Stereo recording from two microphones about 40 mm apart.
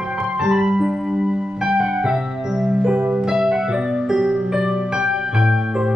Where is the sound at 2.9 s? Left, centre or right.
Right.